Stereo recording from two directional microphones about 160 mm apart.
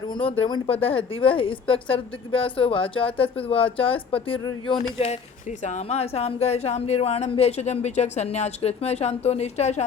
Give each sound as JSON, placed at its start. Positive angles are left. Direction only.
{"t": 0.1, "sound": "speech", "side_deg": 35}
{"t": 4.9, "sound": "speech", "side_deg": 40}